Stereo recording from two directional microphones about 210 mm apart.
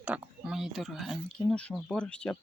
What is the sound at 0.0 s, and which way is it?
Speech, 5° right (ahead or behind).